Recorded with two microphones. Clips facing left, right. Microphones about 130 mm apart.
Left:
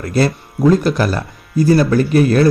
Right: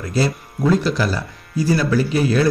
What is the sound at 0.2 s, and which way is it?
Speech, 55° left (ahead or behind).